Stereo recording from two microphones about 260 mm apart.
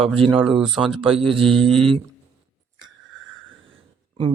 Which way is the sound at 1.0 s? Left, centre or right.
Right.